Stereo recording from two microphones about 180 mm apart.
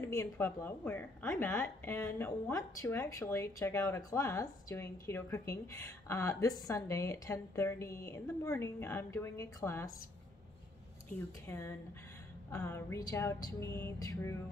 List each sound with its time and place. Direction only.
0.0 s speech: 15° left (ahead or behind)
11.4 s speech: 15° left (ahead or behind)